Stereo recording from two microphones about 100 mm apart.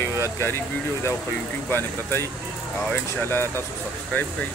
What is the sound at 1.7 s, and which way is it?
Speech, 25° left (ahead or behind).